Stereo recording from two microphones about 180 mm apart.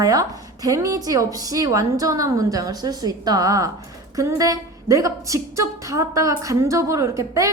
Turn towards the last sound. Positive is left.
turn(degrees=-15)  # may be behind; listen again after turning